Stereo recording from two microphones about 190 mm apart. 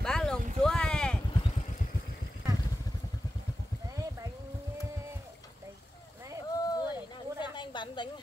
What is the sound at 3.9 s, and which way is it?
Clip-clop, 15° right (ahead or behind).